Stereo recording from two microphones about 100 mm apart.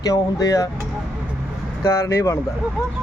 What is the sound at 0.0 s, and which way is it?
Speech, 35° left (ahead or behind).